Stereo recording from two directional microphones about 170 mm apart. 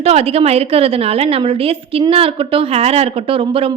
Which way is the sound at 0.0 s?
35° right (ahead or behind).